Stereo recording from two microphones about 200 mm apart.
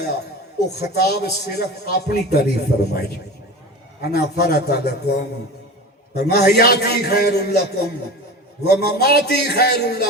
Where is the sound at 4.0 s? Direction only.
55° left (ahead or behind).